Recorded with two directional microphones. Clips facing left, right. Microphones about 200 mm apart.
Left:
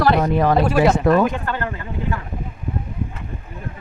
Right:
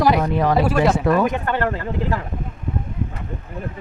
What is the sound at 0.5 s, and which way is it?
Speech, 5° right (ahead or behind).